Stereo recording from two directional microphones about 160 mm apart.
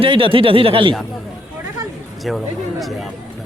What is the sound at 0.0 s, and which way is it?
Speech, 35° right (ahead or behind).